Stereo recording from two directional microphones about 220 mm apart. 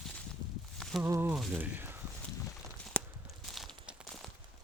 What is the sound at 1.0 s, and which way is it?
Speech, 10° right (ahead or behind).